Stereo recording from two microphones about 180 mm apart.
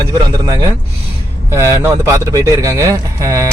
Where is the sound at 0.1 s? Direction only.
20° right (ahead or behind).